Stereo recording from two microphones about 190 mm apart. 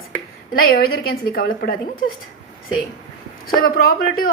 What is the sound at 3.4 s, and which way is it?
Speech, 50° left (ahead or behind).